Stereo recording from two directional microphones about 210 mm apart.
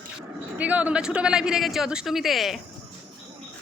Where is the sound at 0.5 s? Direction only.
5° right (ahead or behind).